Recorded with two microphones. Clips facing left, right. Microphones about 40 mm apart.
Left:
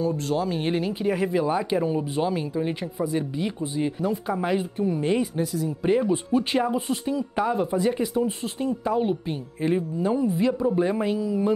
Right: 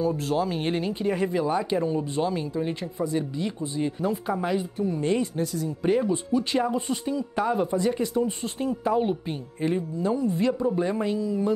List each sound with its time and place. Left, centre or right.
0.0 s speech: centre
4.0 s speech: centre
4.5 s speech: centre
6.0 s speech: left
6.6 s speech: centre
8.5 s speech: centre
9.7 s speech: centre
10.3 s speech: centre